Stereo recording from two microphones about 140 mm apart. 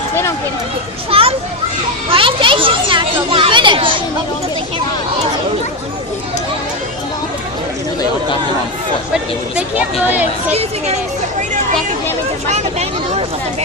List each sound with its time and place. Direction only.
1.1 s speech: 45° right (ahead or behind)
2.0 s children playing: 40° right (ahead or behind)
9.6 s speech: 10° right (ahead or behind)
10.5 s speech: 50° right (ahead or behind)
12.5 s vehicle: 50° right (ahead or behind)